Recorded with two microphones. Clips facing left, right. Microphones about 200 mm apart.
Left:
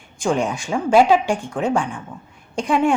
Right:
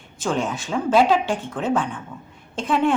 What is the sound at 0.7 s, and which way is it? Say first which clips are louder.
A woman's voice: left 3 dB; 10° left (ahead or behind).